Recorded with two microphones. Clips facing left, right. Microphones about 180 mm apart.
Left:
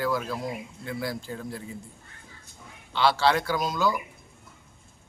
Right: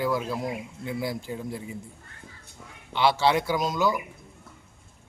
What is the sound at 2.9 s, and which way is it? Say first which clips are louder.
A man's voice: right 1 dB; 20° right (ahead or behind).